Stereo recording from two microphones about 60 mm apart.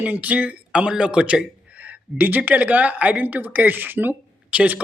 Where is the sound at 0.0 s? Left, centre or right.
Right.